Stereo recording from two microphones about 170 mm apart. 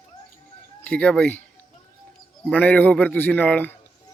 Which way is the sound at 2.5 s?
10° left (ahead or behind).